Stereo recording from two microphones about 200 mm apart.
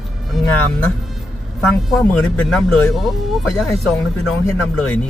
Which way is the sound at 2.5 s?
Centre (ahead or behind).